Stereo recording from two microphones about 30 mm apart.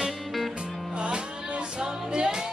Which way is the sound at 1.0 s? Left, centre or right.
Right.